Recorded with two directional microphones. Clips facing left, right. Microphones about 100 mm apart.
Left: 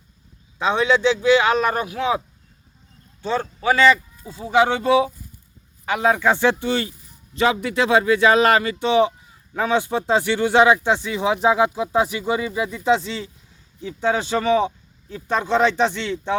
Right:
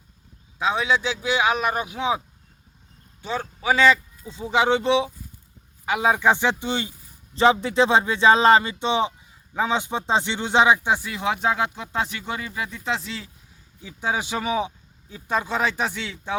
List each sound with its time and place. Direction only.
0.6 s a man's voice: 5° right (ahead or behind)
11.1 s a man's voice: centre (ahead or behind)